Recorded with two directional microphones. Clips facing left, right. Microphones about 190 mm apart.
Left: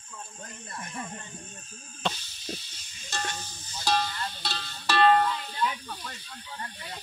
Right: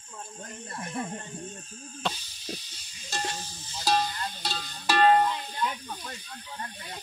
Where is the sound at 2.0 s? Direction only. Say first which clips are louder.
Left 1 dB; 10° right (ahead or behind).